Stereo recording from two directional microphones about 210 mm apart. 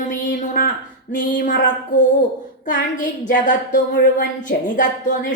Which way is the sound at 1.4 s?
40° left (ahead or behind).